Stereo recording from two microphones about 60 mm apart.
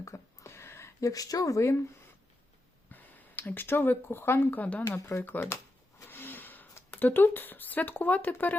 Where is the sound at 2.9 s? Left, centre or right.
Left.